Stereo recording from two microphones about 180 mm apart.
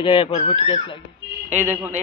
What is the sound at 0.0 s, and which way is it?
Speech, 30° left (ahead or behind).